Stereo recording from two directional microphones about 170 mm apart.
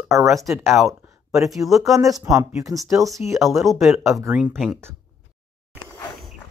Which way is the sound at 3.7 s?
Centre (ahead or behind).